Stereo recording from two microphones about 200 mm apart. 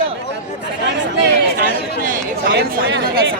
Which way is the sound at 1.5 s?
45° right (ahead or behind).